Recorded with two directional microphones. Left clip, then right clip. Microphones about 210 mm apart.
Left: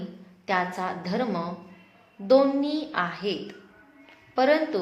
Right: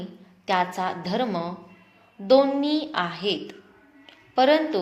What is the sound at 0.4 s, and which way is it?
A woman's voice, 25° right (ahead or behind).